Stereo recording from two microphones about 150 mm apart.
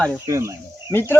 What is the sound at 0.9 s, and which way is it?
Speech, 15° left (ahead or behind).